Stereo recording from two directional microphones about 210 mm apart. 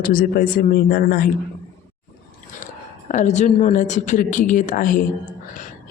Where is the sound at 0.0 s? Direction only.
40° left (ahead or behind).